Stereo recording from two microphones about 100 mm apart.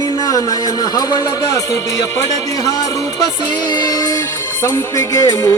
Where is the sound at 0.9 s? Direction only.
35° left (ahead or behind).